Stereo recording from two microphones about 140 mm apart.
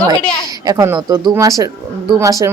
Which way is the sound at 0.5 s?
25° right (ahead or behind).